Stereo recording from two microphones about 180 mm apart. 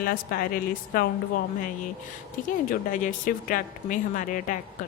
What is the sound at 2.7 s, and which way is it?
Speech, 45° left (ahead or behind).